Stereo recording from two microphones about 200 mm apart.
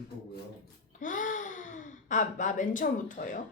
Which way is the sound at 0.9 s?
40° left (ahead or behind).